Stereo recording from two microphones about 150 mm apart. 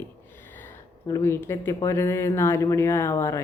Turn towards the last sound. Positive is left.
turn(degrees=20)  # may be behind; listen again after turning